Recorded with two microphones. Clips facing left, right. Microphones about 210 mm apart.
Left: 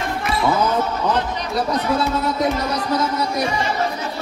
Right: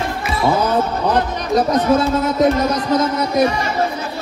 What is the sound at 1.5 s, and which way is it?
Speech, 45° right (ahead or behind).